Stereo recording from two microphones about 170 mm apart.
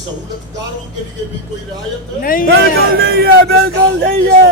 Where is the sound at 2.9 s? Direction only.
65° right (ahead or behind); by 4.1 s 80° right.